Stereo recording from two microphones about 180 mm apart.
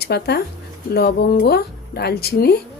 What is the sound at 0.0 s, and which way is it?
Speech, 65° left (ahead or behind).